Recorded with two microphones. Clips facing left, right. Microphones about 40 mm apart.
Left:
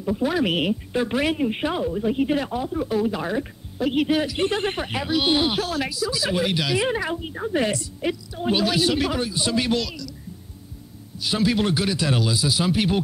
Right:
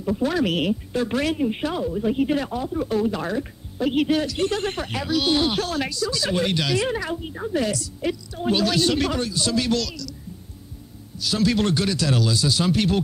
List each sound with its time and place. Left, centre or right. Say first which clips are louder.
0.0 s a woman's voice: even; centre
4.2 s speech: left 1 dB; left
5.6 s speech: even; centre; by 7.9 s left
8.0 s speech: right 1 dB; centre
9.3 s speech: even; left
11.1 s speech: even; centre